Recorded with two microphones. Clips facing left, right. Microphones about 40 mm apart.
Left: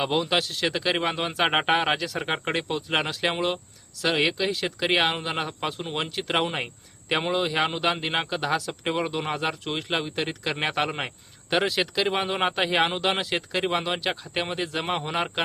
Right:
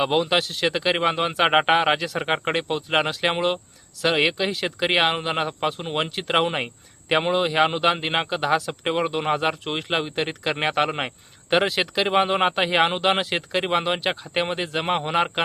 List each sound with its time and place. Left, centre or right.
0.0 s a man's voice: centre